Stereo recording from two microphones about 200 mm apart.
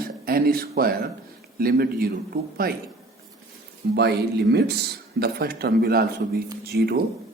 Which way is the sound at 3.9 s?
55° right (ahead or behind).